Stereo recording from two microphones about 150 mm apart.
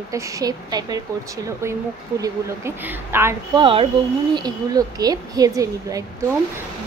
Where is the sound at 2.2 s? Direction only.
15° right (ahead or behind).